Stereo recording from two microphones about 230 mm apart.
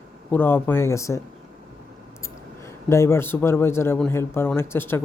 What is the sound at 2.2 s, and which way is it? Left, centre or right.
A man's voice, centre.